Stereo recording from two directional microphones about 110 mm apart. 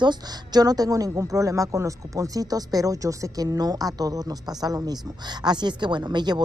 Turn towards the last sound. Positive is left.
turn(degrees=-40)  # may be behind; listen again after turning